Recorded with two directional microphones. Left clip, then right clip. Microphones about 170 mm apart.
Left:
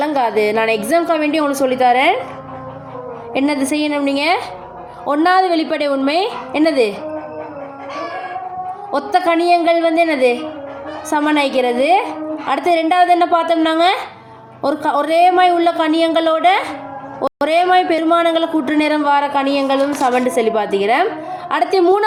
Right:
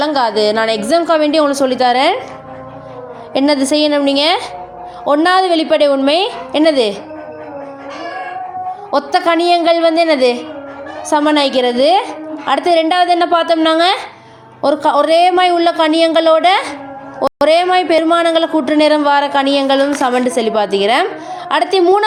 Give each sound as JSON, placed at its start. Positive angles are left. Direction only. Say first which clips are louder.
{"t": 0.2, "sound": "a woman's voice", "louder": "right 1 dB", "side_deg": -30}
{"t": 3.3, "sound": "a woman's voice", "louder": "right 5 dB", "side_deg": -30}
{"t": 9.0, "sound": "speech", "louder": "right 2 dB", "side_deg": -25}